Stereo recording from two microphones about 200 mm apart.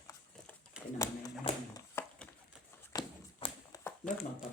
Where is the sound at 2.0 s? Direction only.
10° left (ahead or behind).